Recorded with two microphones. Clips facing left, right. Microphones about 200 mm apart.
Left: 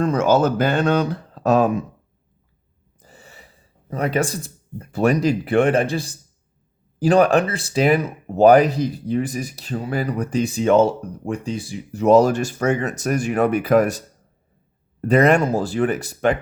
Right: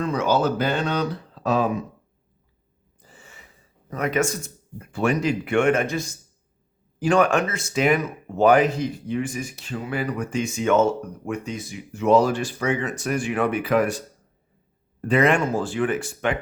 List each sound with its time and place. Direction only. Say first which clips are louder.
0.0 s speech: left 4 dB; 45° left (ahead or behind)
3.0 s speech: left 3 dB; 40° left (ahead or behind)
15.0 s speech: left 4 dB; 40° left (ahead or behind)